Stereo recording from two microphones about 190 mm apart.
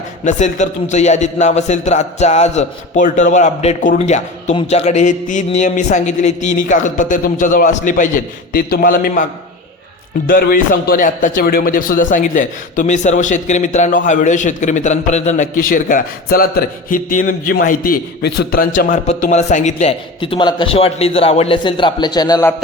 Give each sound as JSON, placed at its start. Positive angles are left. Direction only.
{"t": 0.3, "sound": "a man's voice", "side_deg": 40}
{"t": 10.2, "sound": "a man's voice", "side_deg": 50}